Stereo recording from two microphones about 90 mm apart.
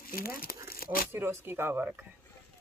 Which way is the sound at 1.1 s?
25° right (ahead or behind).